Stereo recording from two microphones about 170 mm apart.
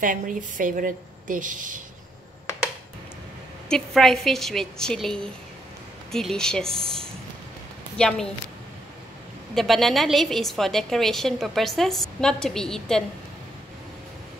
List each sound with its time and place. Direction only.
0.0 s a woman's voice: 50° right (ahead or behind)
3.6 s a woman's voice: 5° left (ahead or behind)
8.0 s a woman's voice: 5° left (ahead or behind)
9.6 s a woman's voice: centre (ahead or behind)